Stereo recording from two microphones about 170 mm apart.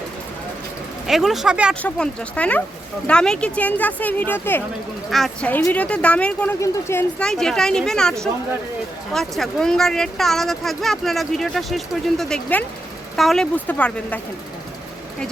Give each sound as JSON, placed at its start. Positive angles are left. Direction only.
{"t": 1.0, "sound": "speech", "side_deg": 0}
{"t": 1.8, "sound": "speech", "side_deg": 5}
{"t": 7.2, "sound": "speech", "side_deg": 5}